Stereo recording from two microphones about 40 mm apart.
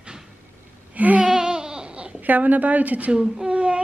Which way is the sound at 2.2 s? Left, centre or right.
Right.